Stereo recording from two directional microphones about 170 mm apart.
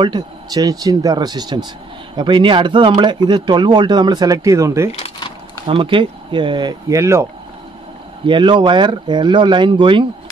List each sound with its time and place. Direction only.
0.0 s speech: 25° right (ahead or behind)
4.9 s cash register: 35° left (ahead or behind)
5.7 s speech: 30° right (ahead or behind)
8.3 s speech: 30° right (ahead or behind)